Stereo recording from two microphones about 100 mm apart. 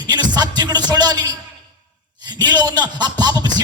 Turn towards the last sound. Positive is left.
turn(degrees=-45)  # may be behind; listen again after turning